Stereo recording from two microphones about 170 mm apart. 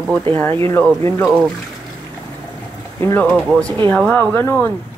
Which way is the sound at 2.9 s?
10° left (ahead or behind).